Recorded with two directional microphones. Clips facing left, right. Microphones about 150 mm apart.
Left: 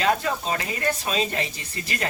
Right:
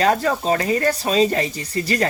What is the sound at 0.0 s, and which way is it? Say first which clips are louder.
Speech: right 5 dB; 40° right (ahead or behind).